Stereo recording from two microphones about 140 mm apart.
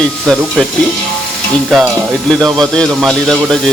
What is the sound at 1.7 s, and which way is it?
Speech, centre (ahead or behind).